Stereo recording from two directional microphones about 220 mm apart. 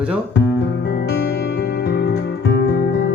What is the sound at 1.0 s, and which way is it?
Music, 50° left (ahead or behind).